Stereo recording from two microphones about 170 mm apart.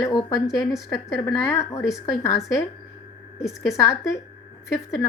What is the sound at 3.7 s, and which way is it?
Speech, 20° left (ahead or behind).